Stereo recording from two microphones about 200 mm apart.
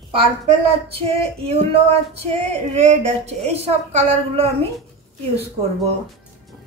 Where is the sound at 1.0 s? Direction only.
30° right (ahead or behind).